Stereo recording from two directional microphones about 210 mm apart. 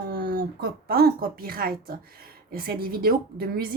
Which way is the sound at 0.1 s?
45° right (ahead or behind).